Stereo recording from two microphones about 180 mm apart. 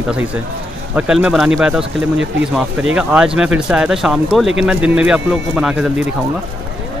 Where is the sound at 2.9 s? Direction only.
5° right (ahead or behind).